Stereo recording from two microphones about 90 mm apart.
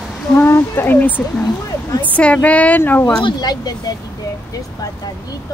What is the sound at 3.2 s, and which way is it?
Speech, 45° left (ahead or behind).